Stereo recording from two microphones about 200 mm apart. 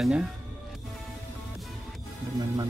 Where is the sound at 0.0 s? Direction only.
Centre (ahead or behind).